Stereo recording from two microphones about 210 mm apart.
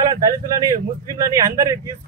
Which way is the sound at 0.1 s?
15° right (ahead or behind).